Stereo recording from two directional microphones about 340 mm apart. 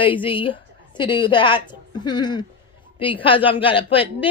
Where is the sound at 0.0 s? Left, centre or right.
Centre.